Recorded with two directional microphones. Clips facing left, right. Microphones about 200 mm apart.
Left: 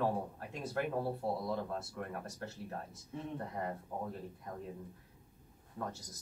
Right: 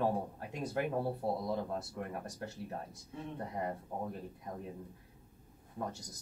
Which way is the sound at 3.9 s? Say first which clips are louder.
Even; 25° right (ahead or behind).